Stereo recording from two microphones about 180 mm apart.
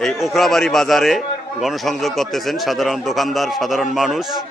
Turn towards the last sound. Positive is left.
turn(degrees=0)  # may be behind; listen again after turning